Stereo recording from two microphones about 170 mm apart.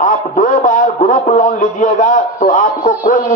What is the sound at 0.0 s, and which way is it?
A man's voice, 55° left (ahead or behind).